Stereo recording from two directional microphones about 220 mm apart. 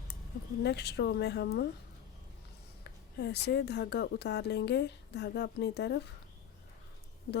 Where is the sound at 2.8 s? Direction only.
50° left (ahead or behind).